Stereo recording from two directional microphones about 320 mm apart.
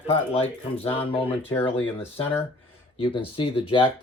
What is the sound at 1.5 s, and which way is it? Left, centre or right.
Speech, centre.